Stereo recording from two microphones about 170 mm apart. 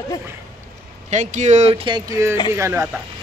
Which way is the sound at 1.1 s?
45° right (ahead or behind).